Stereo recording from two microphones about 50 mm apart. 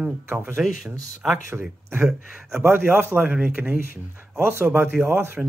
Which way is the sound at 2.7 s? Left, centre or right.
Right.